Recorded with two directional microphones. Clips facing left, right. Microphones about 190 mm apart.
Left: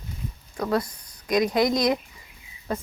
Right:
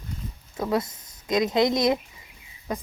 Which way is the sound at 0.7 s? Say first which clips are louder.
Even; 20° right (ahead or behind).